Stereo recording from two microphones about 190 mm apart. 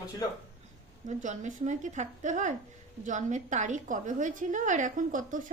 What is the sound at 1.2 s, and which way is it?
A woman's voice, 40° right (ahead or behind).